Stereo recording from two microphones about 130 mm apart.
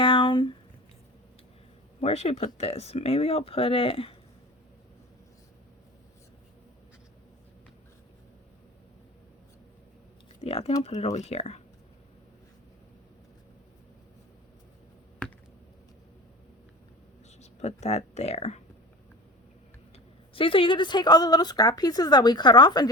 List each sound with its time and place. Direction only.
0.0 s a sound: 40° left (ahead or behind)
2.0 s speech: 55° left (ahead or behind)
10.4 s speech: 50° left (ahead or behind)
17.4 s speech: 60° left (ahead or behind)
20.3 s speech: 40° left (ahead or behind)